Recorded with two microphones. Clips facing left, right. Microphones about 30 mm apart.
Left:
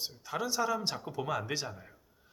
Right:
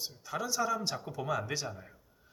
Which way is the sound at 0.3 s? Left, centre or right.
Left.